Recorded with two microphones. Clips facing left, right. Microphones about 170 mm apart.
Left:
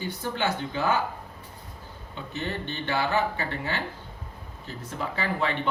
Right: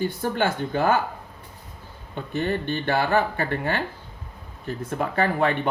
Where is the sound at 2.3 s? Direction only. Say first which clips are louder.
Right 7 dB; 50° right (ahead or behind).